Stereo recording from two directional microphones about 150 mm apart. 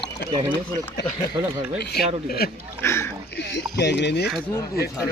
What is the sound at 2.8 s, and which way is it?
Speech, 15° left (ahead or behind).